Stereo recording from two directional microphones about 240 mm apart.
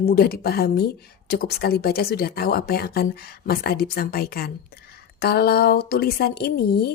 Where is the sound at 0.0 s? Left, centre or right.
Left.